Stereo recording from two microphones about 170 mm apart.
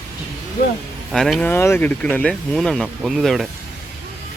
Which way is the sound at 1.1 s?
Centre (ahead or behind).